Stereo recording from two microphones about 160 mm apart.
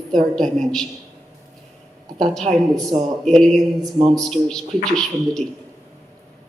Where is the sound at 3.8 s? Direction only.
30° right (ahead or behind).